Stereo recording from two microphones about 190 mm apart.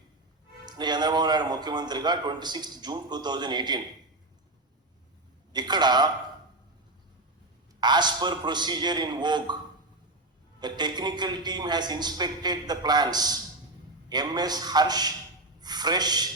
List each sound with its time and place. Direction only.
0.6 s speech: 20° right (ahead or behind)
5.5 s a man's voice: 20° right (ahead or behind)
7.8 s speech: 25° right (ahead or behind)
10.6 s speech: 25° right (ahead or behind)